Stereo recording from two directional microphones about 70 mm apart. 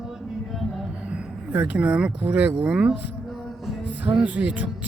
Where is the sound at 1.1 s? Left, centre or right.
Right.